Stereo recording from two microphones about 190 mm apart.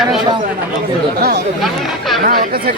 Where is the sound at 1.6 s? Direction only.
Centre (ahead or behind).